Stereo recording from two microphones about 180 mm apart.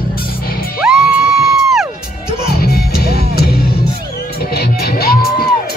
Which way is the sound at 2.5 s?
60° left (ahead or behind).